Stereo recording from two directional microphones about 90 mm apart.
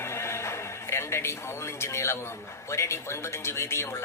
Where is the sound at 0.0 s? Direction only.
30° left (ahead or behind).